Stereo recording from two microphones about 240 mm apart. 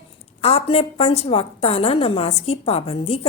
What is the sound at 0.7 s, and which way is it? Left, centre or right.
A woman's voice, left.